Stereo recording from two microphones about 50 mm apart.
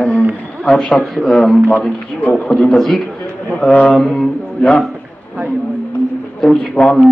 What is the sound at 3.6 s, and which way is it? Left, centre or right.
Speech, left.